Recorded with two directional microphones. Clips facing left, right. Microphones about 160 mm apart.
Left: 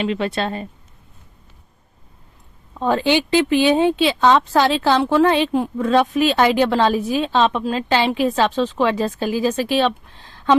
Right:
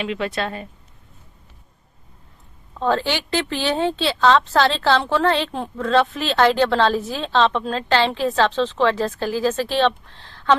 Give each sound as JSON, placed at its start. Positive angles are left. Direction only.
{"t": 0.0, "sound": "speech", "side_deg": 30}
{"t": 2.7, "sound": "a woman's voice", "side_deg": 15}